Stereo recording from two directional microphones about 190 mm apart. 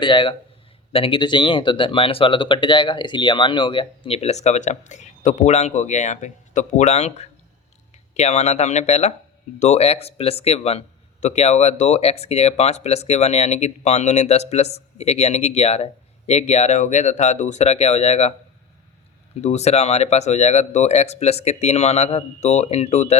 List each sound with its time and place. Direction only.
0.0 s speech: 25° left (ahead or behind)
19.4 s speech: 35° left (ahead or behind)